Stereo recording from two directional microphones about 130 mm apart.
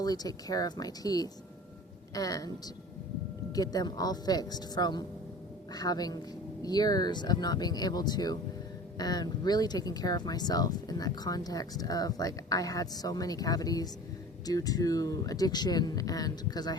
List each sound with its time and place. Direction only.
0.0 s speech: 30° left (ahead or behind)
3.5 s speech: 30° left (ahead or behind)